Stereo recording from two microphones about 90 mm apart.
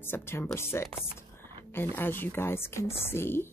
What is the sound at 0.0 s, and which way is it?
A woman's voice, 25° left (ahead or behind).